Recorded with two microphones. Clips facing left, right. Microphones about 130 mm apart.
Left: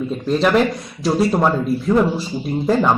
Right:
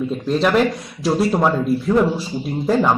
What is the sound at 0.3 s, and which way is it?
A man's voice, centre (ahead or behind).